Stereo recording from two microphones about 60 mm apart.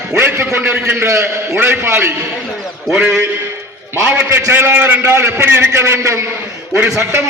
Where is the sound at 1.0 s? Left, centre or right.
Right.